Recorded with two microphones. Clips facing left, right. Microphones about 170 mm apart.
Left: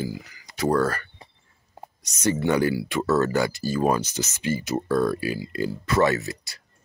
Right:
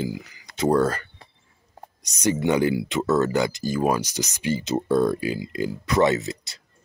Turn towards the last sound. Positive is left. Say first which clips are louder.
# right 2 dB
turn(degrees=-20)  # may be behind; listen again after turning